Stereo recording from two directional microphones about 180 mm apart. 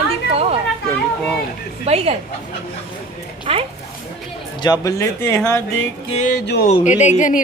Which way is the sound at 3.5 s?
30° right (ahead or behind).